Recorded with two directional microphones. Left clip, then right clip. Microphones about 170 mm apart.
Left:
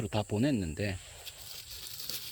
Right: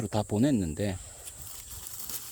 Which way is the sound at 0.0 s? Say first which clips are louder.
Right 3 dB; 20° right (ahead or behind).